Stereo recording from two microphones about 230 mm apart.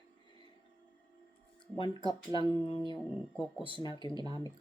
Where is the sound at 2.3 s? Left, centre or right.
Left.